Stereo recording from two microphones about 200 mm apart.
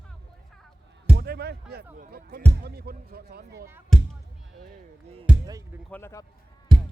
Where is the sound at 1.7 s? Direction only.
50° right (ahead or behind).